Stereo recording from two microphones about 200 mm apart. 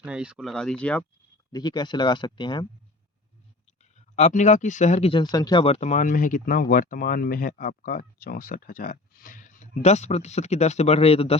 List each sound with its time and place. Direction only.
0.0 s speech: 5° right (ahead or behind)
1.5 s speech: 20° left (ahead or behind)
3.9 s speech: 35° left (ahead or behind)